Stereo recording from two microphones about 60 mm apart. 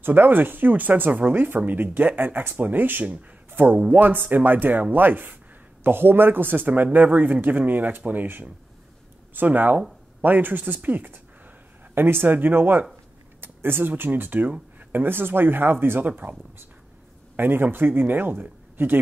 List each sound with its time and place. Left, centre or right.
0.0 s speech: right
16.1 s speech: right
17.4 s speech: right